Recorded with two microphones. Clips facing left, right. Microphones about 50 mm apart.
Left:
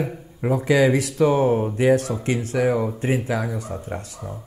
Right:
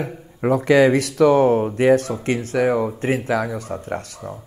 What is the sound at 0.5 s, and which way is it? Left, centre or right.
Speech, right.